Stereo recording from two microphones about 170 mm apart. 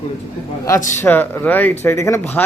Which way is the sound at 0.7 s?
20° left (ahead or behind).